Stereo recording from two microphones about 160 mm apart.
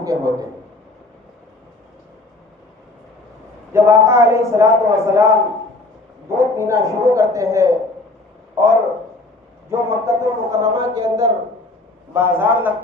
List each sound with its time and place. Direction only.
0.0 s a man's voice: 20° right (ahead or behind)
3.7 s a man's voice: 15° right (ahead or behind)
6.4 s a man's voice: 20° right (ahead or behind)